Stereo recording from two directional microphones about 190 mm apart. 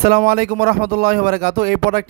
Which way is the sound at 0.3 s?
55° right (ahead or behind).